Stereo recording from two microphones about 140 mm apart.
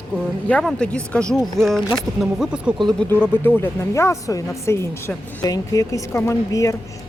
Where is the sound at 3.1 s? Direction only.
15° left (ahead or behind).